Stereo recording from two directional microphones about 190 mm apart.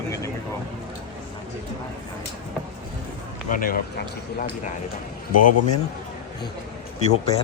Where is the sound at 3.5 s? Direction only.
50° left (ahead or behind).